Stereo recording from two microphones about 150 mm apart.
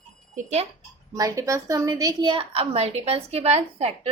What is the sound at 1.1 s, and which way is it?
A woman's voice, 20° right (ahead or behind).